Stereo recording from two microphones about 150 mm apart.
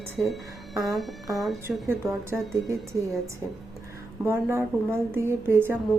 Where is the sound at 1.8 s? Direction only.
15° right (ahead or behind).